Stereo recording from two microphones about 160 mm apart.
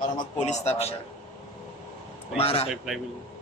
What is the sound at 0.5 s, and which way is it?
Speech, 40° left (ahead or behind).